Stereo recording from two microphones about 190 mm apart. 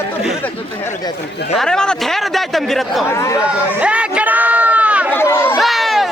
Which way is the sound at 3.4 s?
5° right (ahead or behind).